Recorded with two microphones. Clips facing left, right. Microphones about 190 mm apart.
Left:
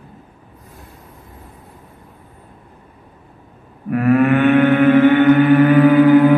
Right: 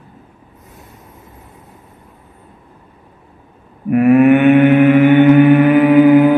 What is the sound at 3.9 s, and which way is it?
Mantra, 20° right (ahead or behind).